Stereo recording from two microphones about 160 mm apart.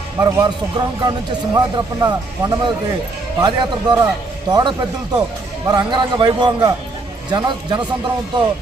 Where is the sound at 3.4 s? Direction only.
25° right (ahead or behind).